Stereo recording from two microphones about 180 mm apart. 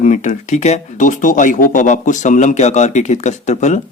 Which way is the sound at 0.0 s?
45° left (ahead or behind).